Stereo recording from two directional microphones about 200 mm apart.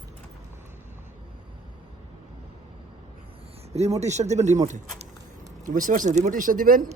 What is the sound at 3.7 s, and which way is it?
Speech, 30° right (ahead or behind).